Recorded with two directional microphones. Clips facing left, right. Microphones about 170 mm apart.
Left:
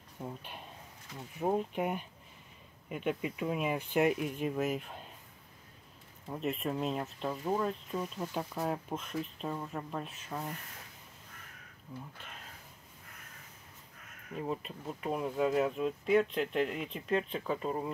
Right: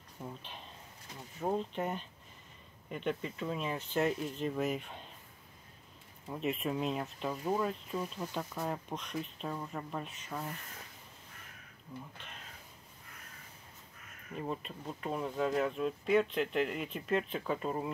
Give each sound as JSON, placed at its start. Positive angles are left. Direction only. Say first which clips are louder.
{"t": 0.2, "sound": "speech", "louder": "left 3 dB", "side_deg": 10}
{"t": 6.2, "sound": "speech", "louder": "even", "side_deg": 0}
{"t": 14.3, "sound": "speech", "louder": "left 2 dB", "side_deg": 5}